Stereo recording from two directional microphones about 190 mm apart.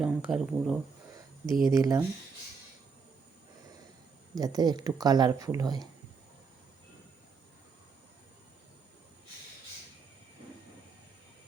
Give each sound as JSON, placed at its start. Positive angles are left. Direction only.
{"t": 0.0, "sound": "speech", "side_deg": -5}
{"t": 1.7, "sound": "speech", "side_deg": -15}
{"t": 4.4, "sound": "speech", "side_deg": -20}